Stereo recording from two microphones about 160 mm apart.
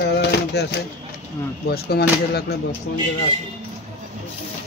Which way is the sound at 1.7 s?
75° left (ahead or behind).